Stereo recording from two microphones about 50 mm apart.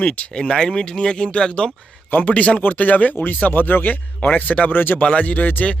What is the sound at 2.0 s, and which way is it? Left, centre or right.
Speech, left.